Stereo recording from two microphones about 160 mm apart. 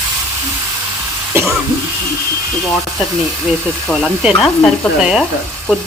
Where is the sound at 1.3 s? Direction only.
15° right (ahead or behind).